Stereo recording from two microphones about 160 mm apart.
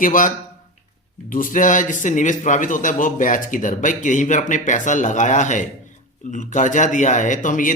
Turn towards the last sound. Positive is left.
turn(degrees=55)  # may be behind; listen again after turning